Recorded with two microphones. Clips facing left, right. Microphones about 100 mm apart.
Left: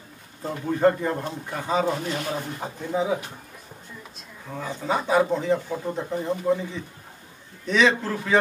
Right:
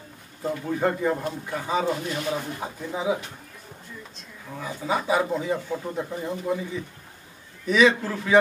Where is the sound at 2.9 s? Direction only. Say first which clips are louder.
Left 2 dB; 5° right (ahead or behind).